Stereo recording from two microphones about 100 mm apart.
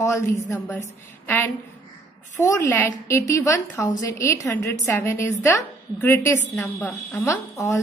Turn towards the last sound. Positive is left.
turn(degrees=30)  # may be behind; listen again after turning